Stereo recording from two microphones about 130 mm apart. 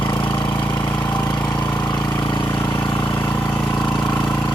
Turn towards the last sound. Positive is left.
turn(degrees=5)  # may be behind; listen again after turning